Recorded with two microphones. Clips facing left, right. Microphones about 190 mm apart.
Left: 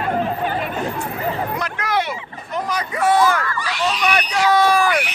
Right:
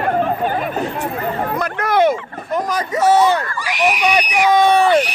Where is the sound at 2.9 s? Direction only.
25° right (ahead or behind).